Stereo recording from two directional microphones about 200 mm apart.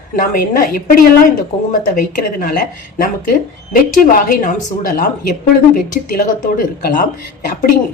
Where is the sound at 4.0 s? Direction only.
45° left (ahead or behind).